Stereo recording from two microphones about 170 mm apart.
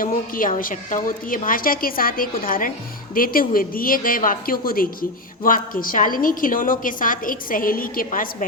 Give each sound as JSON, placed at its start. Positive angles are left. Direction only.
{"t": 0.0, "sound": "a woman's voice", "side_deg": 55}